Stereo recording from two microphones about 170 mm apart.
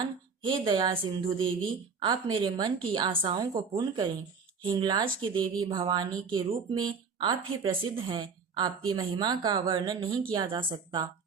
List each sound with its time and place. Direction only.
0.4 s a woman's voice: 30° right (ahead or behind)